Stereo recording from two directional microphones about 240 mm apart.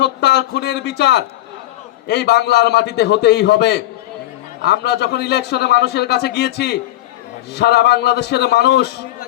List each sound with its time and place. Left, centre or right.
0.0 s a man's voice: left